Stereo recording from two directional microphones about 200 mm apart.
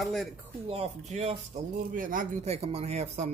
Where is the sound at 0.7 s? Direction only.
30° right (ahead or behind).